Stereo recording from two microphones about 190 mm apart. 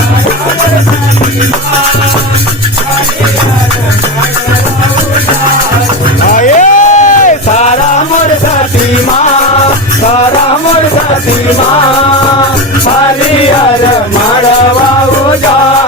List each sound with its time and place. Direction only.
6.3 s music: 40° left (ahead or behind)